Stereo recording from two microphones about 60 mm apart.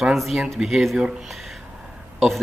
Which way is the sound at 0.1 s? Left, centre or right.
Centre.